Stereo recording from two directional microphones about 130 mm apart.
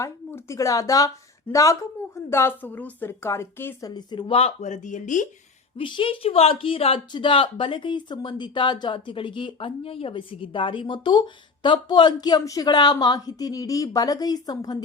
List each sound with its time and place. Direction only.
0.0 s a woman's voice: 20° left (ahead or behind)
3.8 s speech: 35° left (ahead or behind); by 5.3 s 75° left (ahead or behind)
5.7 s a woman's voice: 40° left (ahead or behind)